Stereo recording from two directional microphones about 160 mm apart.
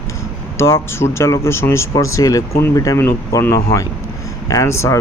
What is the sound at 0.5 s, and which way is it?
Speech, 15° left (ahead or behind).